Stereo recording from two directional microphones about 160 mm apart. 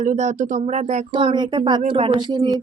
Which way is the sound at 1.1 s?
30° right (ahead or behind).